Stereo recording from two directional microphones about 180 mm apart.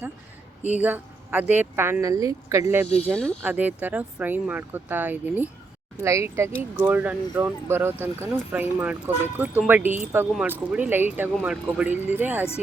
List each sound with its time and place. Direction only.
0.8 s a woman's voice: 10° right (ahead or behind)
3.1 s speech: 5° left (ahead or behind)
3.4 s a woman's voice: 10° right (ahead or behind)